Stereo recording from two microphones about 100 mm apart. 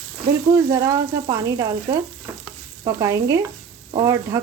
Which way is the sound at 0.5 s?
35° right (ahead or behind).